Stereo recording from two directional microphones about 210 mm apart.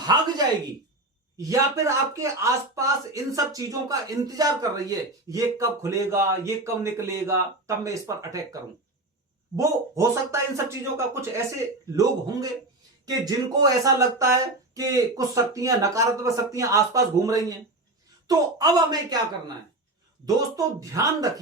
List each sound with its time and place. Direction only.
1.4 s speech: 15° right (ahead or behind)
9.6 s speech: 15° right (ahead or behind)
20.2 s speech: 15° right (ahead or behind)